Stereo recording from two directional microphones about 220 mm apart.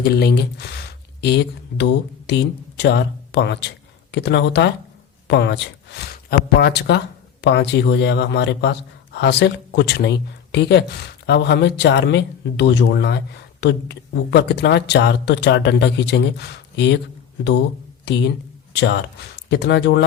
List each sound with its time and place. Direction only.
0.0 s speech: 45° left (ahead or behind)
18.0 s speech: 50° left (ahead or behind)